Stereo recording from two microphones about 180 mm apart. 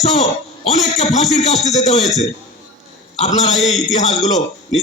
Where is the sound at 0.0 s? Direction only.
35° left (ahead or behind).